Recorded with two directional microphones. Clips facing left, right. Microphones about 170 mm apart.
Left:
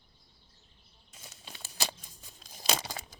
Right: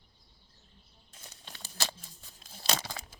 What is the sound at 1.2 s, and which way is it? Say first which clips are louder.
Crumpling: left 1 dB; 10° left (ahead or behind).